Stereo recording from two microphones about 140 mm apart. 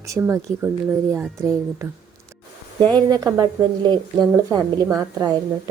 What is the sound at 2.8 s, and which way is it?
Speech, 30° right (ahead or behind).